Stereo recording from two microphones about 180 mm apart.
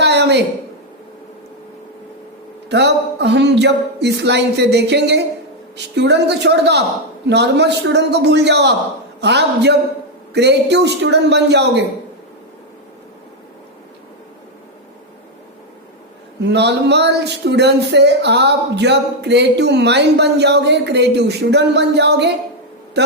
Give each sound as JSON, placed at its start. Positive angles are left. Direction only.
{"t": 0.0, "sound": "a sound", "side_deg": -70}
{"t": 2.6, "sound": "speech", "side_deg": -70}
{"t": 16.4, "sound": "speech", "side_deg": -70}